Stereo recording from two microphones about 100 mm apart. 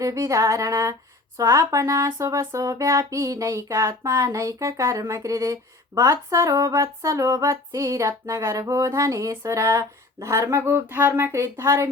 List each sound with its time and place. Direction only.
0.0 s speech: 30° right (ahead or behind)